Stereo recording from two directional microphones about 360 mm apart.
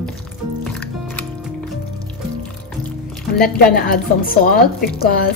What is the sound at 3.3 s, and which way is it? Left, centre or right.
A woman's voice, left.